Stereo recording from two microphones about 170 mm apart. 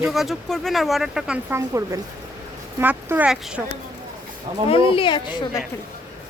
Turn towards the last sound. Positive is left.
turn(degrees=25)  # may be behind; listen again after turning